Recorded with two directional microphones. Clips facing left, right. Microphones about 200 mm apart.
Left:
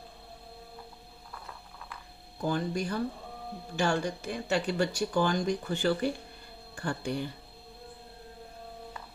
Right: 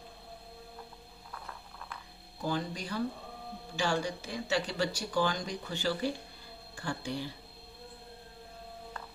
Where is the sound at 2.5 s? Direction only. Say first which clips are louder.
Left 4 dB; 50° left (ahead or behind).